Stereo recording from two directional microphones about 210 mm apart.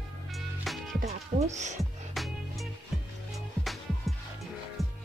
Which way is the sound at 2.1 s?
Centre (ahead or behind).